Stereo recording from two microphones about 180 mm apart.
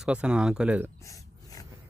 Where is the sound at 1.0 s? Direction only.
20° left (ahead or behind).